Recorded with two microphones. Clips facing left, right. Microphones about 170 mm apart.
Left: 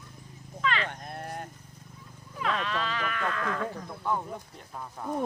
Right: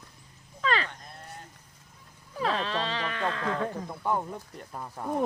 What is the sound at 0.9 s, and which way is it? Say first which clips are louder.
Livestock: left 7 dB; 60° left (ahead or behind).